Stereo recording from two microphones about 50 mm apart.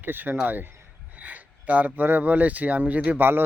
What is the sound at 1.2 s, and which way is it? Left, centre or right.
Speech, right.